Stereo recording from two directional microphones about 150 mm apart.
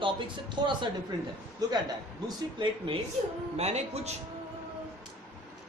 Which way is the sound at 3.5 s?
45° right (ahead or behind).